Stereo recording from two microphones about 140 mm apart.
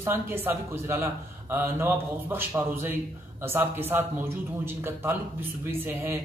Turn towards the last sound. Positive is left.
turn(degrees=-15)  # may be behind; listen again after turning